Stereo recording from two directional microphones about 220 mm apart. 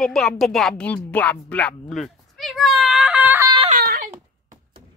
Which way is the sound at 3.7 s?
40° right (ahead or behind).